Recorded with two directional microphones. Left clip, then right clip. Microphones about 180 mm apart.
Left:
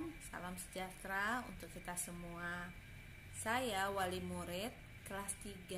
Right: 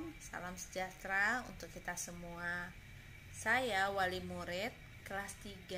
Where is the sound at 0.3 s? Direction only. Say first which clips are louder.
Right 3 dB; centre (ahead or behind).